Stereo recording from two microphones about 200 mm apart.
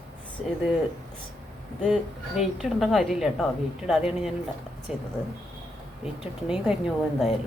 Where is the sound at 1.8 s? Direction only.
Centre (ahead or behind).